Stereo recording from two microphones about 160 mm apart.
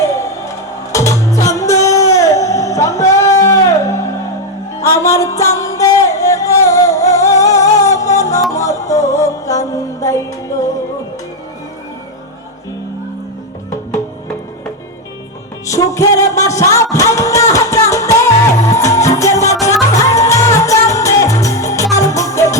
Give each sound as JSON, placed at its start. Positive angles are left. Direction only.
{"t": 0.0, "sound": "music", "side_deg": 20}
{"t": 15.6, "sound": "music", "side_deg": 20}